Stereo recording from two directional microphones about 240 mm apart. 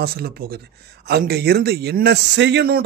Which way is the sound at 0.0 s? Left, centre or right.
Right.